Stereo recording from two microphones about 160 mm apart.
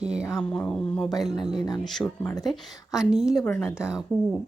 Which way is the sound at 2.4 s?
5° right (ahead or behind).